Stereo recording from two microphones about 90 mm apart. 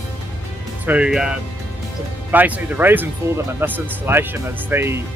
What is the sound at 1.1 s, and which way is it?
Speech, 5° right (ahead or behind).